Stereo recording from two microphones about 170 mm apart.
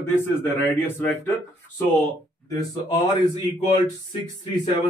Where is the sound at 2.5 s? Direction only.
20° left (ahead or behind).